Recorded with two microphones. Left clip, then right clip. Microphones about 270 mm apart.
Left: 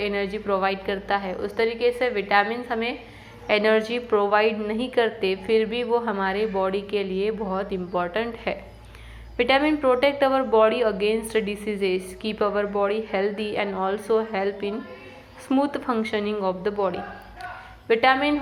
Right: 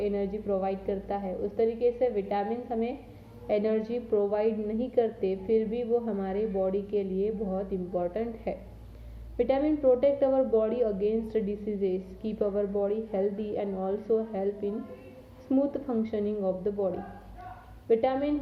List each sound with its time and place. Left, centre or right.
0.0 s a woman's voice: centre